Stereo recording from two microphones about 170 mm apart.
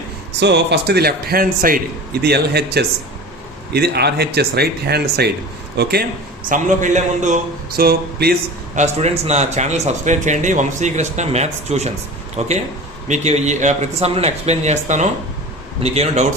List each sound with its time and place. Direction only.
0.3 s a man's voice: 90° right; by 6.1 s 70° right (ahead or behind)
6.5 s speech: 50° right (ahead or behind)
7.8 s a man's voice: 65° right (ahead or behind)
8.7 s speech: 40° right (ahead or behind)